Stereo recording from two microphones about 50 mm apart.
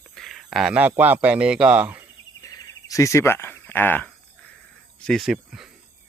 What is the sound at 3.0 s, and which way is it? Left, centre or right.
Speech, left.